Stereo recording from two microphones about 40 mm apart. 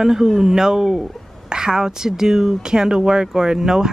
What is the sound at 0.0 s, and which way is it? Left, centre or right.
Speech, centre.